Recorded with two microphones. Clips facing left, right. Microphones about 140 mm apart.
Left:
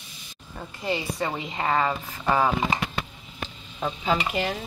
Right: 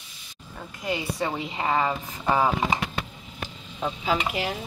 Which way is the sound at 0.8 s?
5° right (ahead or behind).